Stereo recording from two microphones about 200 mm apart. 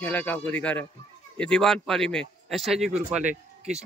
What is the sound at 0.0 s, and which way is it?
A man's voice, 5° left (ahead or behind).